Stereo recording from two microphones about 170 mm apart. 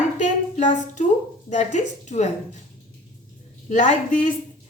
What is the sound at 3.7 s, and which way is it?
Speech, 45° left (ahead or behind).